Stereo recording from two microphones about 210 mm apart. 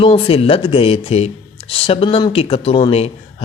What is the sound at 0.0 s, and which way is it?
Speech, 25° left (ahead or behind).